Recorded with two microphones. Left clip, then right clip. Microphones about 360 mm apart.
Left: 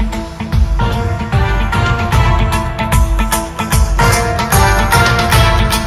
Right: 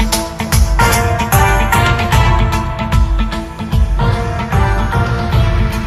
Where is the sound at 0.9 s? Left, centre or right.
Right.